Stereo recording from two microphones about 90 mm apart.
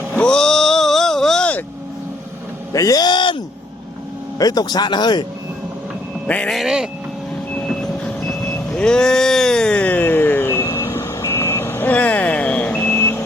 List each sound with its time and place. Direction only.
0.1 s vehicle: 10° left (ahead or behind)
2.7 s speech: 45° left (ahead or behind); by 3.4 s 65° left (ahead or behind)
4.4 s speech: 45° left (ahead or behind)
6.2 s a man's voice: 15° left (ahead or behind)
6.5 s speech: 5° right (ahead or behind)
7.5 s vehicle: 10° left (ahead or behind)